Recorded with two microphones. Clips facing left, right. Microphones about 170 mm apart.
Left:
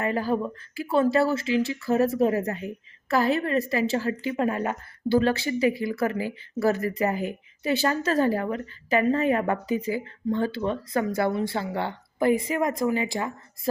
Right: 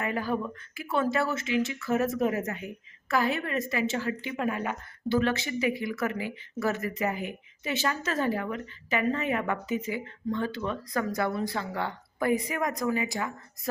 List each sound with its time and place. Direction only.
0.0 s a woman's voice: 35° left (ahead or behind)